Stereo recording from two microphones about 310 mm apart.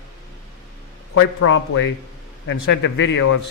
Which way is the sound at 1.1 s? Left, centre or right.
Left.